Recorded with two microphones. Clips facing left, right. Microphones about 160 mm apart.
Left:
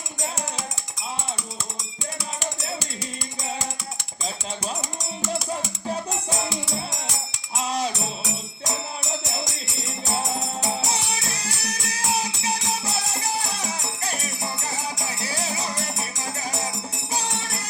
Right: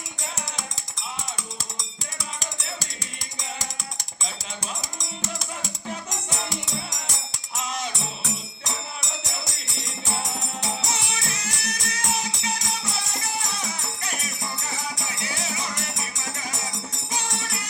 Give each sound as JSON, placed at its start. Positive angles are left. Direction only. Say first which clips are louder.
{"t": 7.7, "sound": "music", "louder": "left 6 dB", "side_deg": 35}
{"t": 10.9, "sound": "music", "louder": "left 2 dB", "side_deg": 35}